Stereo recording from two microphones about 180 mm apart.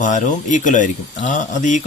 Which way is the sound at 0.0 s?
45° left (ahead or behind).